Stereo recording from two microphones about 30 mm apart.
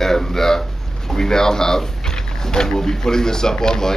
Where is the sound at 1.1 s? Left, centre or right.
Left.